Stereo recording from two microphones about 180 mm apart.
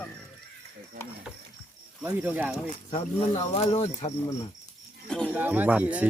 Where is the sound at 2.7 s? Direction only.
35° left (ahead or behind).